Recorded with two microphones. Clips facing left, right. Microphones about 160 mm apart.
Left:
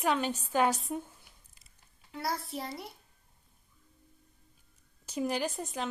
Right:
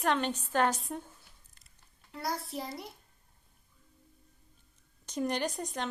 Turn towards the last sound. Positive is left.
turn(degrees=5)  # may be behind; listen again after turning